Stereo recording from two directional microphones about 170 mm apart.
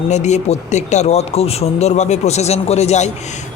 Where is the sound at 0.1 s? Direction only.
45° left (ahead or behind).